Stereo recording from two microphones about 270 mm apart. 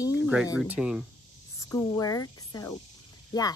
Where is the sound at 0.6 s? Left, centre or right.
Centre.